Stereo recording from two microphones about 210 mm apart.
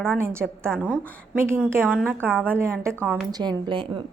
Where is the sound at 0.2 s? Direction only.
10° right (ahead or behind).